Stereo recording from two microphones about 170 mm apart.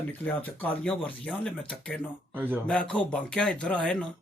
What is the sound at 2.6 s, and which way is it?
Speech, 5° left (ahead or behind).